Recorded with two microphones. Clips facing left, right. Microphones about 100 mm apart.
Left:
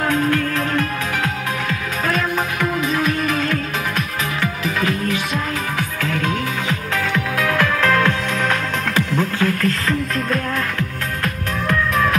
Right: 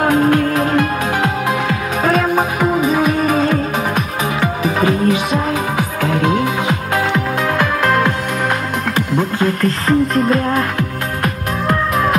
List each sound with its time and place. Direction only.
0.0 s music: 20° right (ahead or behind)
9.1 s music: 15° right (ahead or behind)
9.6 s music: 30° right (ahead or behind)
11.6 s music: 35° right (ahead or behind)